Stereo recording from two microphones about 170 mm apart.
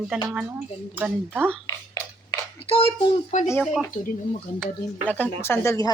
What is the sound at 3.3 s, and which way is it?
Speech, 45° left (ahead or behind).